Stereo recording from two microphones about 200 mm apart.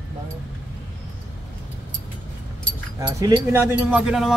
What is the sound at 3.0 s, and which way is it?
Speech, 20° right (ahead or behind).